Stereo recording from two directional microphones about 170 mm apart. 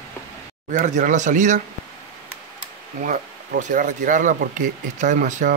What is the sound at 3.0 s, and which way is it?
Speech, 50° right (ahead or behind).